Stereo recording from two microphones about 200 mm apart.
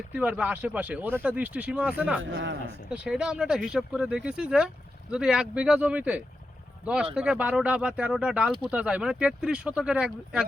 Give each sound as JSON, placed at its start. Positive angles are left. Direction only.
{"t": 0.1, "sound": "speech", "side_deg": -5}
{"t": 2.3, "sound": "a man's voice", "side_deg": -65}
{"t": 2.9, "sound": "speech", "side_deg": -5}